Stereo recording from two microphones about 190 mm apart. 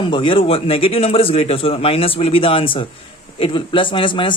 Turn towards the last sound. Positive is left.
turn(degrees=25)  # may be behind; listen again after turning